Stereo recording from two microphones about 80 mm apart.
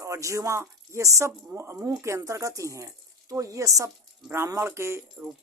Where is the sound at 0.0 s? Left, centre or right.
Right.